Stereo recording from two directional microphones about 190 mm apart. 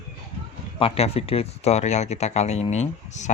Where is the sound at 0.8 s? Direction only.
30° left (ahead or behind).